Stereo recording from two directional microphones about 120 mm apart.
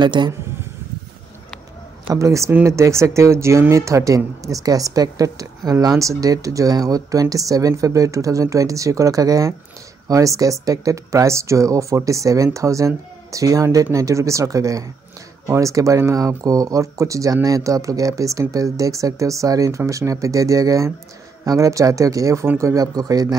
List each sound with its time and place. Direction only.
0.0 s speech: 40° right (ahead or behind)
2.0 s speech: 25° right (ahead or behind)